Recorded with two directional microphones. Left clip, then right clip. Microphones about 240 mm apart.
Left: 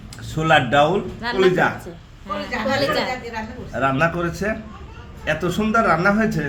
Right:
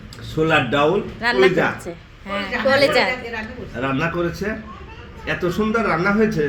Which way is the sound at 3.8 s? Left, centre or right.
Left.